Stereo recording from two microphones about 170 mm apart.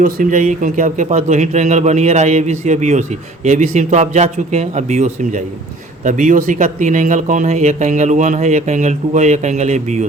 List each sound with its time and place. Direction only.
0.0 s speech: 50° right (ahead or behind)